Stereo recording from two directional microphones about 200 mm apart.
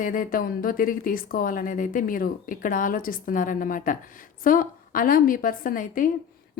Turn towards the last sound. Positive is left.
turn(degrees=45)  # may be behind; listen again after turning